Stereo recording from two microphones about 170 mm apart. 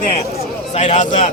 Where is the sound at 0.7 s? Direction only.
40° left (ahead or behind).